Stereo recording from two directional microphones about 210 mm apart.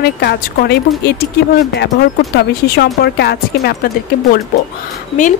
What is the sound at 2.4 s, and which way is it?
Speech, 50° left (ahead or behind).